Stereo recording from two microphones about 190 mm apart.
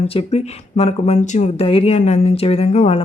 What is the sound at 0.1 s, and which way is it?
Speech, 30° left (ahead or behind).